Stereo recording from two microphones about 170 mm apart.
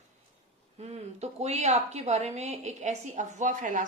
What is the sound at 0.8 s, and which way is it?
A woman's voice, 40° right (ahead or behind).